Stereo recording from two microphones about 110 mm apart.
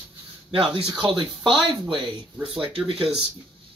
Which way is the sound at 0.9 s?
50° right (ahead or behind).